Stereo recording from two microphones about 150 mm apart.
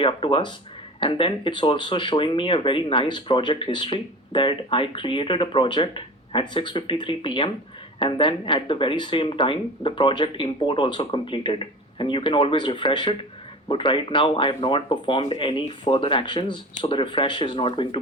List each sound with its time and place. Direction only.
0.0 s speech: 35° left (ahead or behind)